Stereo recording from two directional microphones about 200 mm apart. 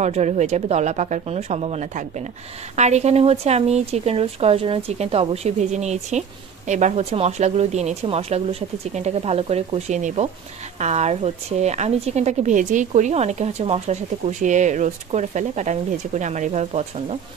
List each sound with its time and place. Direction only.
0.0 s speech: 35° right (ahead or behind)